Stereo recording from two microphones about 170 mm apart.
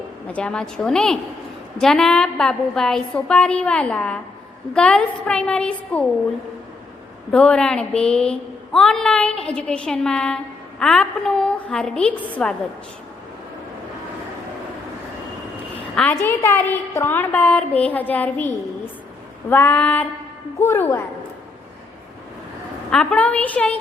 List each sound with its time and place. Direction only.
0.3 s a woman's voice: 5° left (ahead or behind)
7.3 s a woman's voice: 5° left (ahead or behind)
16.0 s a woman's voice: 10° left (ahead or behind)
22.9 s a woman's voice: 5° left (ahead or behind)